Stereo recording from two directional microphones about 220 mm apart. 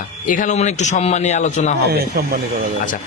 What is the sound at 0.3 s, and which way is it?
A man's voice, 35° left (ahead or behind).